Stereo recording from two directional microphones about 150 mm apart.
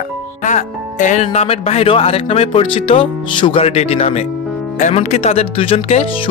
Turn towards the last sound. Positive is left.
turn(degrees=40)  # may be behind; listen again after turning